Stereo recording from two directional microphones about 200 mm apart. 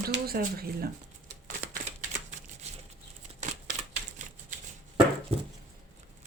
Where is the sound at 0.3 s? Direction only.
50° right (ahead or behind).